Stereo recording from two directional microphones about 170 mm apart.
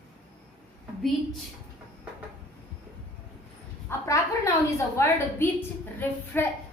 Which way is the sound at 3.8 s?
15° left (ahead or behind).